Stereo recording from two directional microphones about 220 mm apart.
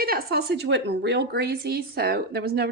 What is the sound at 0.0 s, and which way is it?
A woman's voice, 45° right (ahead or behind).